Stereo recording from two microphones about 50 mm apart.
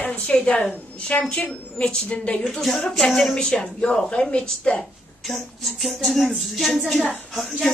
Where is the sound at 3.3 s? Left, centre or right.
Centre.